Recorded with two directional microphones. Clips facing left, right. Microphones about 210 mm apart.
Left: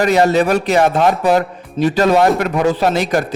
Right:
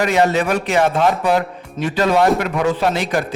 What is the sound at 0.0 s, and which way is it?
Speech, 40° left (ahead or behind).